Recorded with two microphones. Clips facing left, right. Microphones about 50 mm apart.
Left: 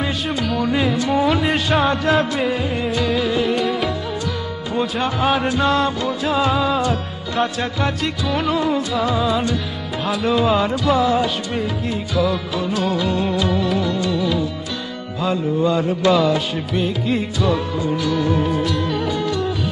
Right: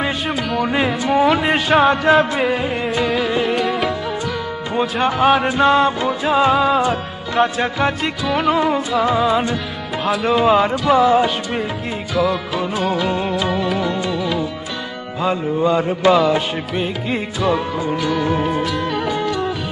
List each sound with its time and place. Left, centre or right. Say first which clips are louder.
0.6 s music: right 1 dB; right
2.4 s music: right 2 dB; centre
3.3 s music: even; centre
3.5 s music: right 1 dB; centre
5.0 s music: right 6 dB; centre
5.5 s music: right 4 dB; centre
8.5 s music: right 3 dB; centre
10.0 s music: right 3 dB; centre
12.2 s music: right 2 dB; centre
13.8 s music: even; centre
14.1 s music: left 1 dB; centre
15.2 s music: right 1 dB; right
17.9 s music: even; centre